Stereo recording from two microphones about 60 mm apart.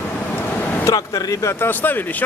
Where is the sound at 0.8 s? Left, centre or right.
Left.